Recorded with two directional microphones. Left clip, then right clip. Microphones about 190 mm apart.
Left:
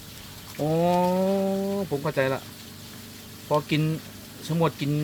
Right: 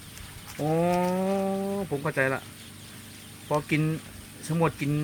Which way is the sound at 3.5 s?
Centre (ahead or behind).